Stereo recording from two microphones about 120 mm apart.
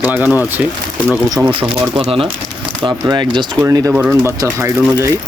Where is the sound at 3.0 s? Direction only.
40° right (ahead or behind).